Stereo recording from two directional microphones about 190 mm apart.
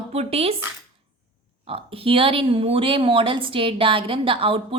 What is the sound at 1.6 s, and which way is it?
Speech, 30° right (ahead or behind).